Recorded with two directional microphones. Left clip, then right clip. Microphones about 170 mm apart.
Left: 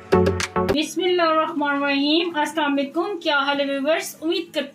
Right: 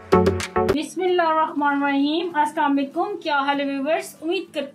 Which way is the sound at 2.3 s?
50° left (ahead or behind).